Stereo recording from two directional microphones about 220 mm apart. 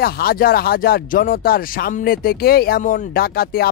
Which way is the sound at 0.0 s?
45° left (ahead or behind).